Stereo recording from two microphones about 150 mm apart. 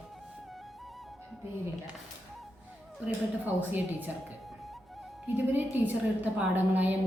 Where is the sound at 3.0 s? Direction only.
10° right (ahead or behind).